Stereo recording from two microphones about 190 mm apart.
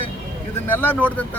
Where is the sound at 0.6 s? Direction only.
10° left (ahead or behind).